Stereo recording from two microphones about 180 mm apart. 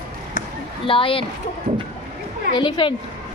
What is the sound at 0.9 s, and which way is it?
Speech, 30° left (ahead or behind).